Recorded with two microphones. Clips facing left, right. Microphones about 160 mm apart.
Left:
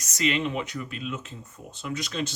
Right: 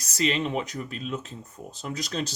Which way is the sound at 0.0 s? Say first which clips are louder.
Even; 35° right (ahead or behind).